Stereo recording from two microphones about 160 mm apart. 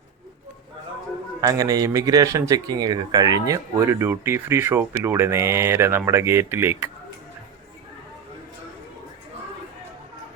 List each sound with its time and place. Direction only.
1.4 s speech: 20° right (ahead or behind)